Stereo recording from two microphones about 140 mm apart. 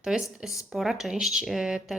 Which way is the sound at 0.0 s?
5° right (ahead or behind).